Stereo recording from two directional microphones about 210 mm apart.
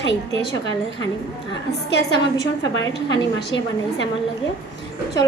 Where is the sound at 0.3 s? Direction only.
60° left (ahead or behind).